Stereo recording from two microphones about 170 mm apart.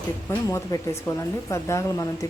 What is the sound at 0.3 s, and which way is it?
A woman's voice, 15° left (ahead or behind).